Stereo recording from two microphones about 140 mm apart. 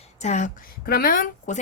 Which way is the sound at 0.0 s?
55° left (ahead or behind).